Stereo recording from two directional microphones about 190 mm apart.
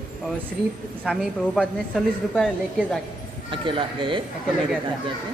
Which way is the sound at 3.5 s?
25° right (ahead or behind).